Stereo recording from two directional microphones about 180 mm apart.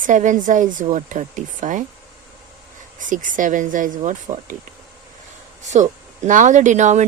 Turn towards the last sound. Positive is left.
turn(degrees=-40)  # may be behind; listen again after turning